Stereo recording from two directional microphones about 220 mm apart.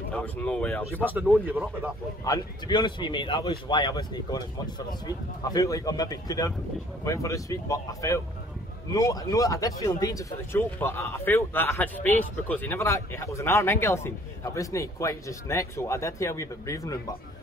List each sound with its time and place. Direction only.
0.1 s speech: 5° left (ahead or behind)
1.0 s speech: 10° right (ahead or behind)
2.2 s speech: 20° left (ahead or behind)